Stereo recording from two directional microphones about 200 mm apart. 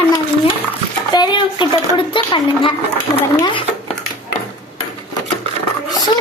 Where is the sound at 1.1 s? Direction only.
20° left (ahead or behind).